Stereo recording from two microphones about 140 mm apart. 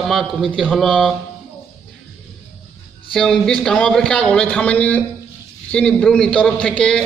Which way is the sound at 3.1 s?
5° left (ahead or behind).